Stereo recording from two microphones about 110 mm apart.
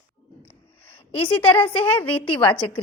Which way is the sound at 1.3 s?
50° left (ahead or behind).